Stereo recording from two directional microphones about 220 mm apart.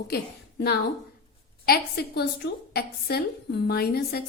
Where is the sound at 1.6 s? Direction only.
45° left (ahead or behind).